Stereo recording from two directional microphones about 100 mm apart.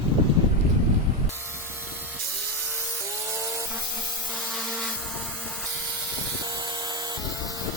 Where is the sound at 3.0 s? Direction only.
30° right (ahead or behind).